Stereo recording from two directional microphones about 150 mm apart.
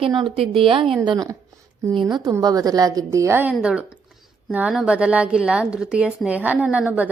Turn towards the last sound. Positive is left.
turn(degrees=-10)  # may be behind; listen again after turning